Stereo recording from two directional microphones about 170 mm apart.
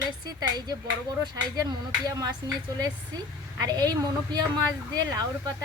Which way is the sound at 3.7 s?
25° right (ahead or behind).